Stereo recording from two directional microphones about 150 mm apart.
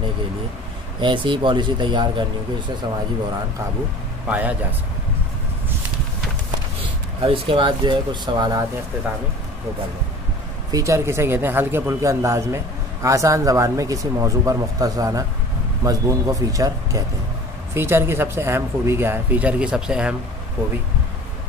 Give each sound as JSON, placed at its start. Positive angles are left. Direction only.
{"t": 1.0, "sound": "speech", "side_deg": -35}
{"t": 4.3, "sound": "speech", "side_deg": -10}
{"t": 7.2, "sound": "speech", "side_deg": -40}
{"t": 10.7, "sound": "a man's voice", "side_deg": -20}